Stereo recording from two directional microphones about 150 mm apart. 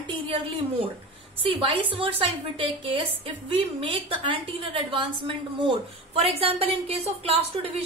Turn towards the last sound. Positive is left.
turn(degrees=-40)  # may be behind; listen again after turning